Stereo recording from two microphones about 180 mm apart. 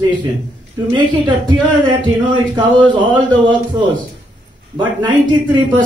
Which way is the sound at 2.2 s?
25° right (ahead or behind).